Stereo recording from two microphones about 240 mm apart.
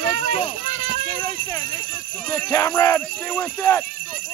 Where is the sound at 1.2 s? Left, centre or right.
Centre.